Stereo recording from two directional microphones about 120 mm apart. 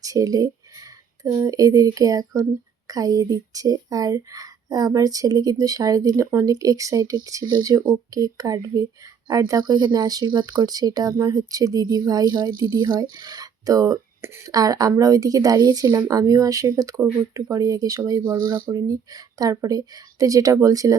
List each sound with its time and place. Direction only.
0.0 s speech: 30° right (ahead or behind)
9.6 s speech: 35° right (ahead or behind)